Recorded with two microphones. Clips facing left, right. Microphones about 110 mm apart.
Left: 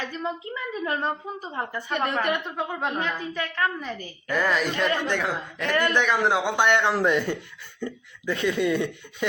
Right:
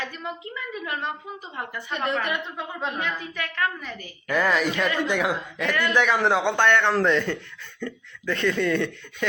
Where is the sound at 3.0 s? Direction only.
30° left (ahead or behind).